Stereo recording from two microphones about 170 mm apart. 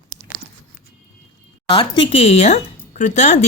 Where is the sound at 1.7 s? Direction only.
30° left (ahead or behind).